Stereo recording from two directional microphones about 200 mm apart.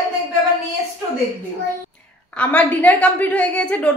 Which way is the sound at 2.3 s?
5° left (ahead or behind).